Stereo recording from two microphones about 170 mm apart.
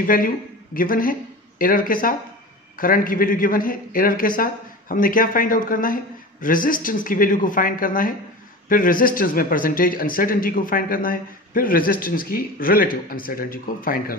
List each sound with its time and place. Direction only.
0.0 s speech: 55° left (ahead or behind)